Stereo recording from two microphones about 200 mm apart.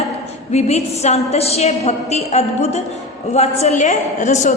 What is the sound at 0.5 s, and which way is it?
A woman's voice, 35° left (ahead or behind).